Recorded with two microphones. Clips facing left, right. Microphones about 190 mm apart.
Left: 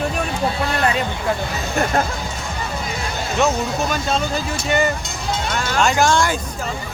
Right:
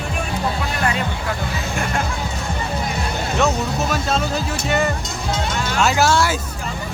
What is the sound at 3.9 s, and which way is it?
Speech, centre (ahead or behind).